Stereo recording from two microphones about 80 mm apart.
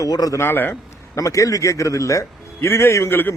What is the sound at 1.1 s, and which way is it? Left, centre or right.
A man's voice, left.